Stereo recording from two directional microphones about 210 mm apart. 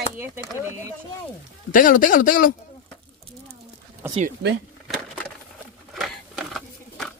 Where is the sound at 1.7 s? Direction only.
40° left (ahead or behind).